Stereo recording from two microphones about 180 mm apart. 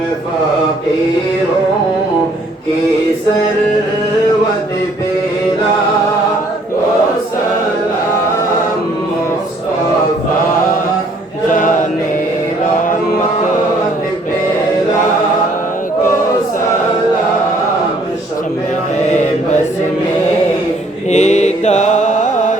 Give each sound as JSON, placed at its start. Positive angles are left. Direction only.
{"t": 11.5, "sound": "music", "side_deg": 45}
{"t": 21.1, "sound": "mantra", "side_deg": 40}